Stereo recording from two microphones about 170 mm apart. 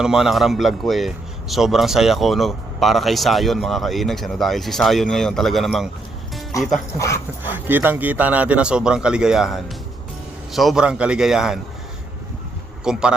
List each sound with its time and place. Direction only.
0.0 s a man's voice: 5° right (ahead or behind)
6.5 s speech: 20° left (ahead or behind)
7.4 s a man's voice: 10° right (ahead or behind)
12.8 s a man's voice: 5° right (ahead or behind)